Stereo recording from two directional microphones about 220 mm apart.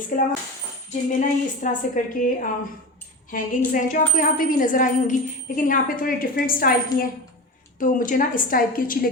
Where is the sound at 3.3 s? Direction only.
40° left (ahead or behind).